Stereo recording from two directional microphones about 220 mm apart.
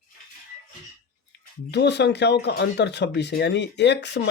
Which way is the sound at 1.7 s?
50° left (ahead or behind).